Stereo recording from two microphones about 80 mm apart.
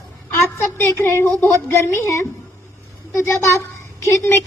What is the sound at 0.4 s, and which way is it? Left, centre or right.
A woman's voice, left.